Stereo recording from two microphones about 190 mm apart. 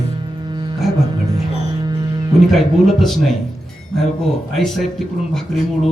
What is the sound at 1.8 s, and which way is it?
Music, 20° right (ahead or behind).